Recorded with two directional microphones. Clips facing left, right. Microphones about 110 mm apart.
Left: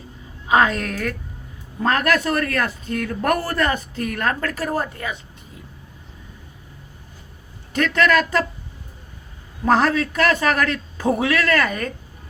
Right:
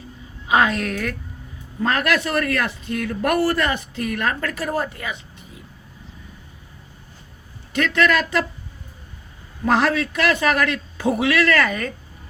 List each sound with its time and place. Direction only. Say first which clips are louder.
0.4 s speech: left 1 dB; 40° left (ahead or behind)
7.7 s speech: left 1 dB; 40° left (ahead or behind)
9.6 s speech: left 1 dB; 40° left (ahead or behind)